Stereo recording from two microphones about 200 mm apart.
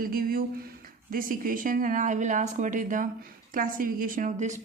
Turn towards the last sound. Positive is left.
turn(degrees=-35)  # may be behind; listen again after turning